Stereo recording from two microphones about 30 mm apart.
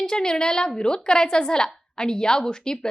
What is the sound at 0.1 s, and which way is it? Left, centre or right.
A woman's voice, left.